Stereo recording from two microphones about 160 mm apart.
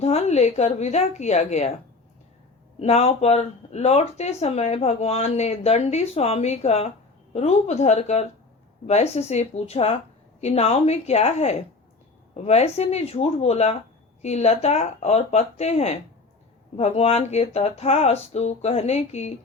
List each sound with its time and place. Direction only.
0.0 s speech: 40° left (ahead or behind)
2.7 s speech: 40° left (ahead or behind)